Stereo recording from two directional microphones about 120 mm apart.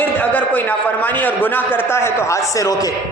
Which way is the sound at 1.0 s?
15° left (ahead or behind).